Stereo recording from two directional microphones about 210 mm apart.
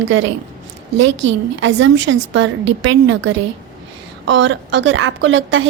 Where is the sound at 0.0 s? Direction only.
60° right (ahead or behind).